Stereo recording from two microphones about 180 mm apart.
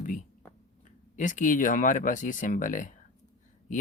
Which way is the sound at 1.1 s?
45° left (ahead or behind).